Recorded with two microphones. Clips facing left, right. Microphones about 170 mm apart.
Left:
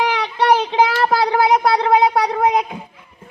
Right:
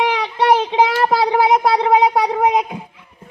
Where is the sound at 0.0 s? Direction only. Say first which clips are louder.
Right 1 dB; 5° right (ahead or behind).